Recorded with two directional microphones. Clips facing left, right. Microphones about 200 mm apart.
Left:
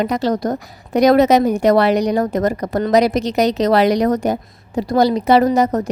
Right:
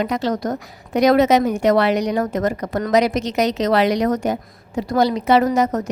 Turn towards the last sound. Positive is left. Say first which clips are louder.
# left 3 dB
turn(degrees=35)  # may be behind; listen again after turning